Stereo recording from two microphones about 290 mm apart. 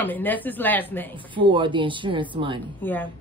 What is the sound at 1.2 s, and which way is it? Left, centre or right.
Speech, centre.